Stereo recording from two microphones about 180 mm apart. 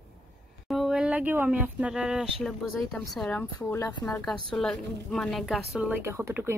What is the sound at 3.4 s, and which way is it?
Speech, 15° left (ahead or behind).